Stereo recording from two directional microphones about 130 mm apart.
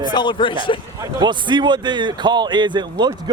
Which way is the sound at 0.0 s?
35° left (ahead or behind).